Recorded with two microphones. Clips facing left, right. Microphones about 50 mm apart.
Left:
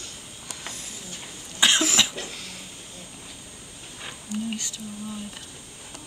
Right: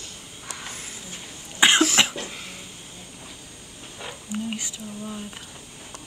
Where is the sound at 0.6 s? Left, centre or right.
Right.